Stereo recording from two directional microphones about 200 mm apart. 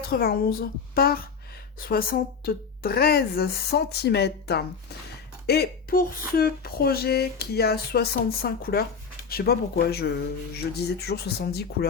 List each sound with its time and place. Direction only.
0.1 s speech: 50° left (ahead or behind)